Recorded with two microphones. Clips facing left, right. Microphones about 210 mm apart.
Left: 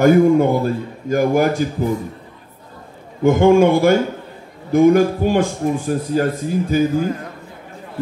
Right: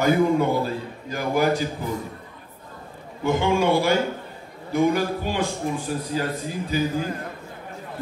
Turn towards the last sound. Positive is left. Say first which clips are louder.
# left 8 dB
turn(degrees=50)  # may be behind; listen again after turning